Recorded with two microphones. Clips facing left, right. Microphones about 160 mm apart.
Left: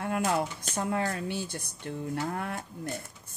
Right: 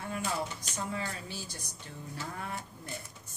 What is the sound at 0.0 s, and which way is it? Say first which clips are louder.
Speech: left 7 dB; 60° left (ahead or behind).